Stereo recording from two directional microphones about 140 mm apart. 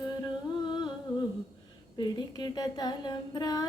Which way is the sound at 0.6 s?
30° left (ahead or behind).